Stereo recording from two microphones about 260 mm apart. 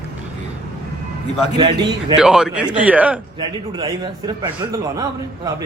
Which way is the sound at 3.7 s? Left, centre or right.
Centre.